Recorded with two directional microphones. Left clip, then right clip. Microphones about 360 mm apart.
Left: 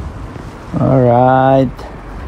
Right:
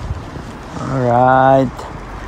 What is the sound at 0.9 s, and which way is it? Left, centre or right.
Speech, centre.